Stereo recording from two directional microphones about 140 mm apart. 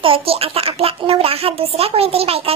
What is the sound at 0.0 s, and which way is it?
Speech, 40° right (ahead or behind).